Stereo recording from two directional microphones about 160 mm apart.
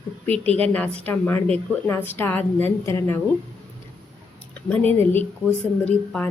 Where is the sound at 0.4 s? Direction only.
40° right (ahead or behind).